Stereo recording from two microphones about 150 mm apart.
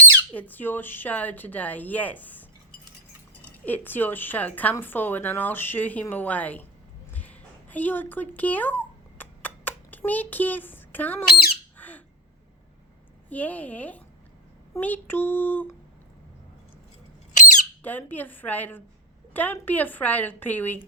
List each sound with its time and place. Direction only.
0.3 s speech: 10° left (ahead or behind)
3.7 s speech: 15° left (ahead or behind)
7.1 s a sound: 10° left (ahead or behind)
11.8 s squawk: 10° left (ahead or behind)
13.3 s speech: 10° left (ahead or behind)
17.3 s squawk: 55° left (ahead or behind)
17.8 s speech: 10° left (ahead or behind)